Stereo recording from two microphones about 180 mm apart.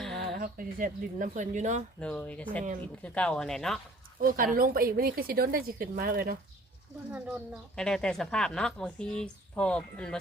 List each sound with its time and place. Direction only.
0.3 s speech: 50° right (ahead or behind)
2.0 s a woman's voice: 5° left (ahead or behind)
4.2 s speech: 50° right (ahead or behind)
7.8 s a woman's voice: 5° left (ahead or behind)